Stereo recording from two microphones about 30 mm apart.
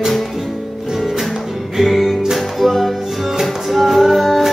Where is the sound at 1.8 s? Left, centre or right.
Centre.